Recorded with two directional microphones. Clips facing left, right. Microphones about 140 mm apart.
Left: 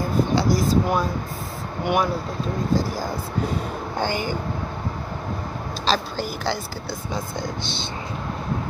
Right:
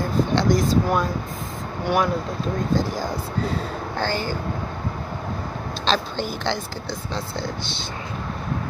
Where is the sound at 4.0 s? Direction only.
15° left (ahead or behind).